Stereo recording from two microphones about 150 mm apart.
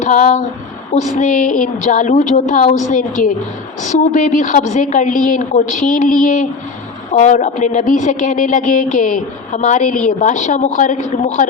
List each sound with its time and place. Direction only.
0.0 s speech: 55° left (ahead or behind)